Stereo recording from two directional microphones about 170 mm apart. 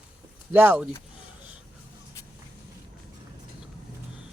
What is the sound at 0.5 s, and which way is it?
Speech, 10° right (ahead or behind).